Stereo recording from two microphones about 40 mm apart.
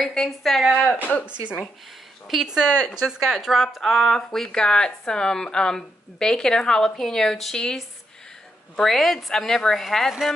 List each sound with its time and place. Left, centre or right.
0.0 s a woman's voice: centre
0.4 s speech: centre
0.7 s a woman's voice: centre
2.4 s speech: centre
3.3 s a woman's voice: centre
8.7 s a woman's voice: centre